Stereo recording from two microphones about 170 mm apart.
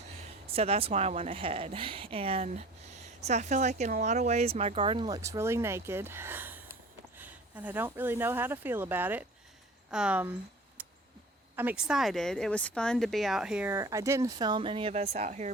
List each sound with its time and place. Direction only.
0.4 s speech: 35° right (ahead or behind); by 10.3 s 10° right (ahead or behind)
10.8 s a sound: 10° right (ahead or behind)
11.5 s speech: 10° right (ahead or behind); by 15.4 s 40° right (ahead or behind)